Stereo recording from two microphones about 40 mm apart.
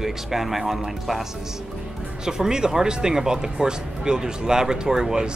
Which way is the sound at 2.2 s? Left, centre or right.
Centre.